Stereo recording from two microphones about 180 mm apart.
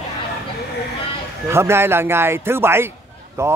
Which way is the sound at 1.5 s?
15° right (ahead or behind).